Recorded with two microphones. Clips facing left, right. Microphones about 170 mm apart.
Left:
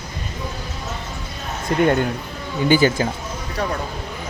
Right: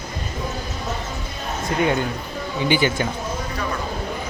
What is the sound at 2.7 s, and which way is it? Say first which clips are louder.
Speech: left 4 dB; 40° left (ahead or behind).